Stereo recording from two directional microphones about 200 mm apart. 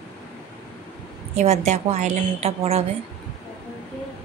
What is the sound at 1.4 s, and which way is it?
A woman's voice, 35° right (ahead or behind).